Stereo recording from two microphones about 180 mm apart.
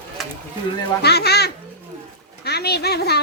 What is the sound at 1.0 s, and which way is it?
Speech, 65° left (ahead or behind).